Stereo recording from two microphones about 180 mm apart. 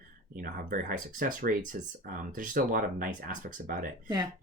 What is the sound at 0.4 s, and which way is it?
Speech, 50° right (ahead or behind).